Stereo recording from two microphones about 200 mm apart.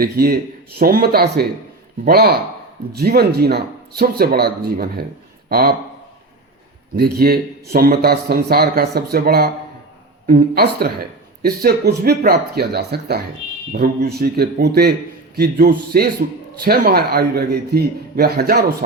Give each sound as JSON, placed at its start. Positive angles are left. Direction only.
{"t": 0.0, "sound": "a man's voice", "side_deg": -50}
{"t": 6.9, "sound": "a man's voice", "side_deg": -50}